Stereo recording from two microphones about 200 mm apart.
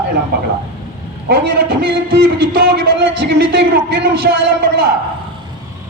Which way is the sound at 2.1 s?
50° right (ahead or behind).